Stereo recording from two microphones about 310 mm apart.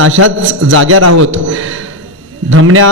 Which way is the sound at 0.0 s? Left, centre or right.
Right.